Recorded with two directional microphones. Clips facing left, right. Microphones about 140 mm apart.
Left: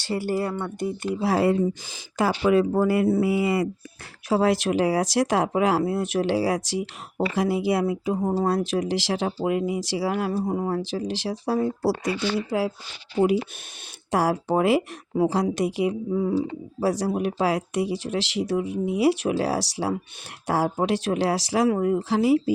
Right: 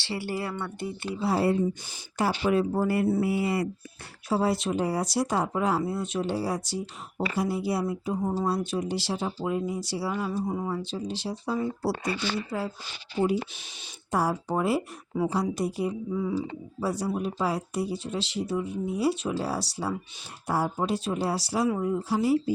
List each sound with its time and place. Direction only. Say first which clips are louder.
0.0 s speech: left 6 dB; 45° left (ahead or behind)
1.2 s speech: left 3 dB; 90° left; by 8.3 s 70° left (ahead or behind)
8.4 s speech: left 4 dB; 90° left; by 11.9 s 70° left (ahead or behind)
12.0 s speech: left 5 dB; 85° left
14.1 s speech: left 5 dB; 90° left
16.1 s speech: left 5 dB; 55° left (ahead or behind)
16.8 s speech: left 5 dB; 90° left